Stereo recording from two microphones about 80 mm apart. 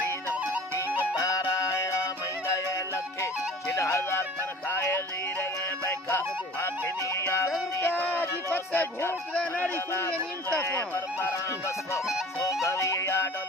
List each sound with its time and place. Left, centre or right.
0.9 s music: right
1.1 s music: left
9.3 s speech: centre
10.6 s speech: left
12.6 s music: left